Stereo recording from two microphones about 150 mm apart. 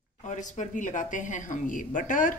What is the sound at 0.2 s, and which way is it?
Speech, 55° left (ahead or behind).